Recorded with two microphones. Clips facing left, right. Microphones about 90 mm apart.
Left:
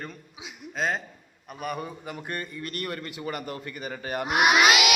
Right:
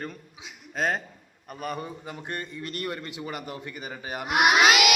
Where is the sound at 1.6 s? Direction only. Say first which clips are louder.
Left 1 dB; 25° right (ahead or behind); by 4.4 s 10° right (ahead or behind).